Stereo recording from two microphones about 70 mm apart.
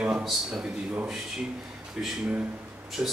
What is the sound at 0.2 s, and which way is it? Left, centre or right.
Speech, centre.